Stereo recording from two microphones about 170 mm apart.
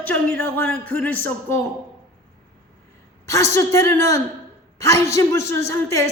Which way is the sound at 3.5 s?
15° left (ahead or behind).